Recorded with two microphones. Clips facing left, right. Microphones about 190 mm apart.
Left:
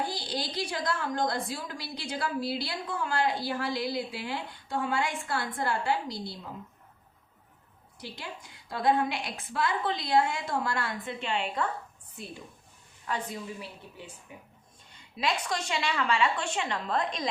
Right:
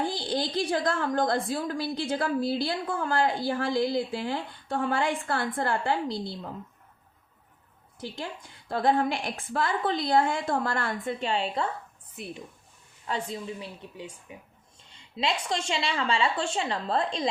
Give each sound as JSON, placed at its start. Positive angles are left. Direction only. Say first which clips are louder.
{"t": 0.0, "sound": "a woman's voice", "louder": "right 5 dB", "side_deg": -50}
{"t": 8.7, "sound": "a woman's voice", "louder": "right 2 dB", "side_deg": -50}
{"t": 12.1, "sound": "a woman's voice", "louder": "right 4 dB", "side_deg": -20}